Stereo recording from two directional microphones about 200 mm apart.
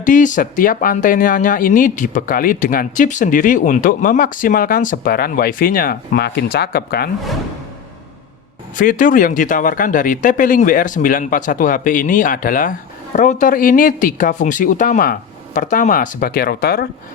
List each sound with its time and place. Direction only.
0.0 s speech: 40° left (ahead or behind)
8.7 s speech: 40° left (ahead or behind)